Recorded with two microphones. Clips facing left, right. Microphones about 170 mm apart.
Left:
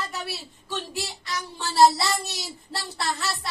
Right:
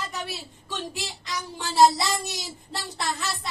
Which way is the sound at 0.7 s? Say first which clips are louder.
Left 1 dB; 20° right (ahead or behind).